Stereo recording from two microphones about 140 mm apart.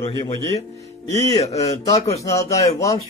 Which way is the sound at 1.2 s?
25° left (ahead or behind).